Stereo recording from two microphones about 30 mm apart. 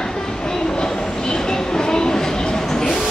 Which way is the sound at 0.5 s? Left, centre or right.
Left.